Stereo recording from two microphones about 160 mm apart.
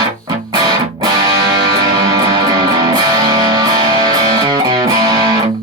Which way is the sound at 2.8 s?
25° right (ahead or behind).